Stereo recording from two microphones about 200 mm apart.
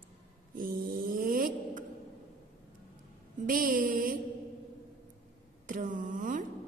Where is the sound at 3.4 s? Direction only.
45° right (ahead or behind).